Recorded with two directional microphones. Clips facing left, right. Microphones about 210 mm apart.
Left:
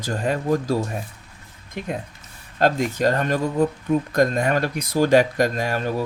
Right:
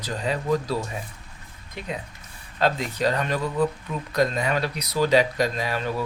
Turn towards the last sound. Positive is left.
turn(degrees=45)  # may be behind; listen again after turning